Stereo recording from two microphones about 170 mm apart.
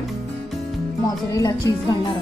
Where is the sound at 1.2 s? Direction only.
20° left (ahead or behind).